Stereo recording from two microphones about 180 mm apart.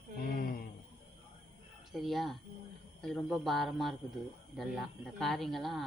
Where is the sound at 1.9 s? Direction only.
Centre (ahead or behind).